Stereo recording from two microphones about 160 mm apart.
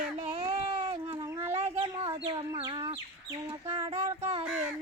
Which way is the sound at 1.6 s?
35° right (ahead or behind).